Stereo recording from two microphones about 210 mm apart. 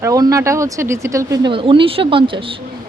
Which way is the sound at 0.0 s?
15° right (ahead or behind).